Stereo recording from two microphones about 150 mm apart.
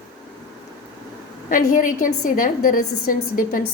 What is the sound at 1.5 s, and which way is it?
A woman's voice, 65° left (ahead or behind).